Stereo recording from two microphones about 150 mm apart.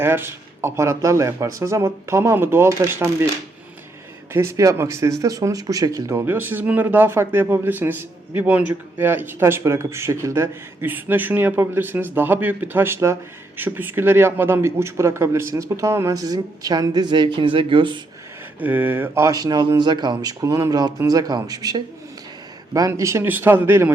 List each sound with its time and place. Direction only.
0.0 s speech: 15° right (ahead or behind)
4.3 s a man's voice: 15° right (ahead or behind); by 18.0 s 35° right (ahead or behind)
18.6 s a man's voice: 10° right (ahead or behind)